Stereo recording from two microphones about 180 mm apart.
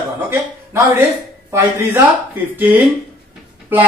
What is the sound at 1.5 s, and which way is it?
A man's voice, 15° right (ahead or behind).